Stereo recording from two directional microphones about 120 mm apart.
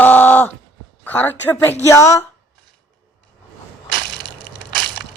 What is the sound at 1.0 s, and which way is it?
Speech, 15° left (ahead or behind).